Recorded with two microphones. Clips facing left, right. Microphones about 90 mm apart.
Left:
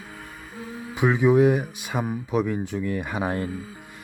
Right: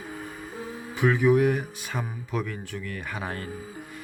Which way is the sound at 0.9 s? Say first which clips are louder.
Left 2 dB; 20° left (ahead or behind).